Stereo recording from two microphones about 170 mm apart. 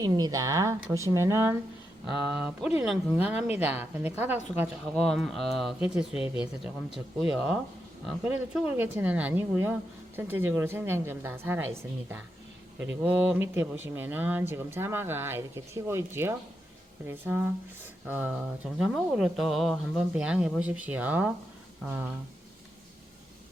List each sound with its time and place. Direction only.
0.0 s speech: 20° right (ahead or behind)
2.0 s speech: 5° right (ahead or behind)
4.9 s speech: centre (ahead or behind)
13.0 s speech: 10° right (ahead or behind)